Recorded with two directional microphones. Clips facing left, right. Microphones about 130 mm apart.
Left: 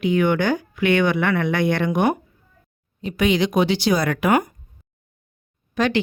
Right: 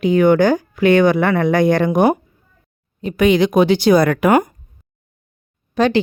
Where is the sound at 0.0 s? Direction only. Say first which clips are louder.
Right 6 dB; 40° right (ahead or behind).